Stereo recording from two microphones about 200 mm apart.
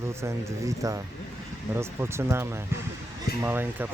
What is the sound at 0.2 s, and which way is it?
Speech, 15° right (ahead or behind).